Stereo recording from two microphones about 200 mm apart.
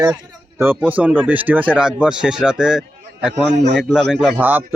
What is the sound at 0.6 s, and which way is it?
A man's voice, 10° right (ahead or behind).